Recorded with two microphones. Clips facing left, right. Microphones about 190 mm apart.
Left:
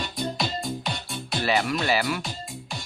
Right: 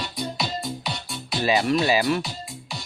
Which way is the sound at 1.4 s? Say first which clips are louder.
Right 4 dB; 20° right (ahead or behind).